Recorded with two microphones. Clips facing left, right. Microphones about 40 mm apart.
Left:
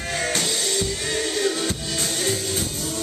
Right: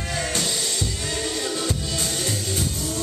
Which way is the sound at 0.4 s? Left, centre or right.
Centre.